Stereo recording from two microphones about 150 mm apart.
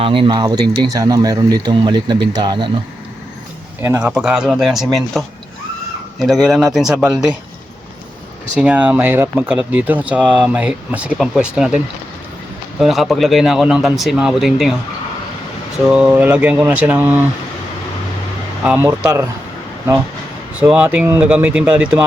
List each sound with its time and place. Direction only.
0.0 s speech: 35° right (ahead or behind)
3.8 s a man's voice: 15° right (ahead or behind)
4.0 s speech: 5° right (ahead or behind)
8.5 s speech: 10° right (ahead or behind)
12.8 s speech: centre (ahead or behind)
15.9 s speech: 5° right (ahead or behind)
18.6 s speech: 5° right (ahead or behind)
20.6 s speech: 10° right (ahead or behind)